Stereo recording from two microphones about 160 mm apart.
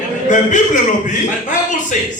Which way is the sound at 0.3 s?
50° left (ahead or behind).